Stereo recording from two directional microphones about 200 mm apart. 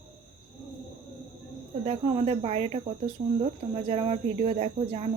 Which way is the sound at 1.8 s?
30° right (ahead or behind).